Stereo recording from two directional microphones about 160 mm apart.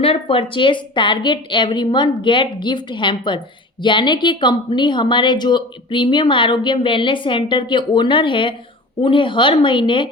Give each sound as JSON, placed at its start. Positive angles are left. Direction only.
{"t": 0.0, "sound": "a woman's voice", "side_deg": 35}